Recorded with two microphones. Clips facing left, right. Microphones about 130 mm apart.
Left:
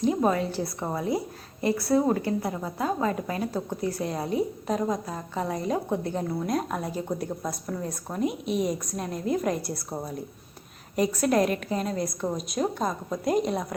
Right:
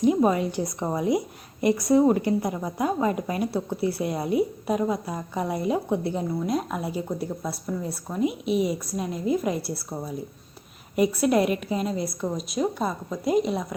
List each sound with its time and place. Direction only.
0.2 s a woman's voice: 15° right (ahead or behind)
10.9 s a woman's voice: 10° right (ahead or behind)